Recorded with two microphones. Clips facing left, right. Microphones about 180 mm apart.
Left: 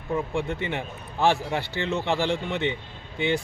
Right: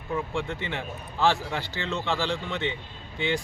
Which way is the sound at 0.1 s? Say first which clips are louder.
Left 3 dB; 15° left (ahead or behind).